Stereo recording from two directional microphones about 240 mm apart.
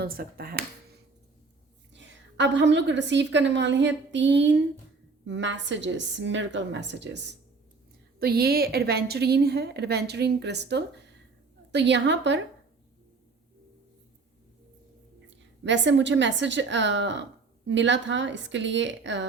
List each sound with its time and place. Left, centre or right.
0.0 s speech: right
1.9 s a woman's voice: right
15.3 s a woman's voice: right